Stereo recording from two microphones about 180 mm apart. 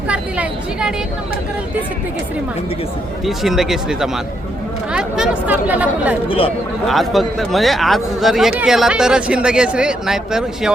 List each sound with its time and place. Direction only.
0.1 s a sound: 5° right (ahead or behind)
3.2 s a man's voice: centre (ahead or behind)
6.2 s speech: 30° left (ahead or behind)
6.8 s a man's voice: centre (ahead or behind)